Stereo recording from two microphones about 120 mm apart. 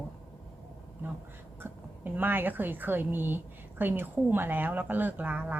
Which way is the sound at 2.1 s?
15° right (ahead or behind).